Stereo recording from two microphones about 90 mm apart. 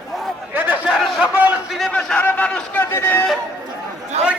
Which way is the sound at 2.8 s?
25° left (ahead or behind).